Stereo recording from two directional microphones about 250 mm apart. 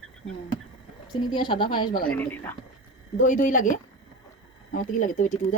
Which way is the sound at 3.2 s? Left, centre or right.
Left.